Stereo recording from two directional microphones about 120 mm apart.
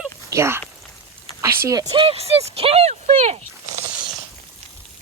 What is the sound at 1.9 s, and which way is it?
Speech, 45° right (ahead or behind).